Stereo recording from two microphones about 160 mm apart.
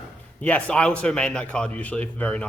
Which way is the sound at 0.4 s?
10° left (ahead or behind).